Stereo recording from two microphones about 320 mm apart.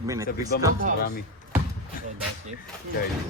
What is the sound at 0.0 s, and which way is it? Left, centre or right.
Speech, centre.